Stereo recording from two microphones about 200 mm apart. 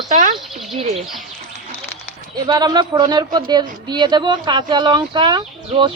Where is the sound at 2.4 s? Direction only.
20° right (ahead or behind).